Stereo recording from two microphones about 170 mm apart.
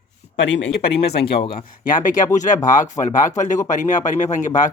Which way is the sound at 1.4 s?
30° left (ahead or behind).